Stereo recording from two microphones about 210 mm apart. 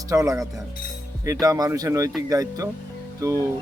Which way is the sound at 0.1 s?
15° right (ahead or behind).